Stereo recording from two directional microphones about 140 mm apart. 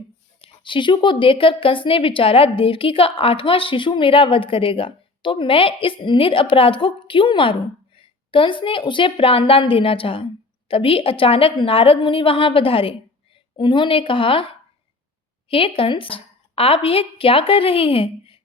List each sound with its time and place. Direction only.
0.4 s a woman's voice: 35° left (ahead or behind)